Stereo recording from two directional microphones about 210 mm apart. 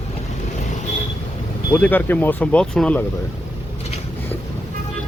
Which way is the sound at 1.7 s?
10° left (ahead or behind).